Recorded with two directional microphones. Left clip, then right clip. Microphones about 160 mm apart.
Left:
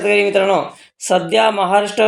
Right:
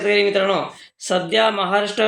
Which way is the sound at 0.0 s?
30° left (ahead or behind).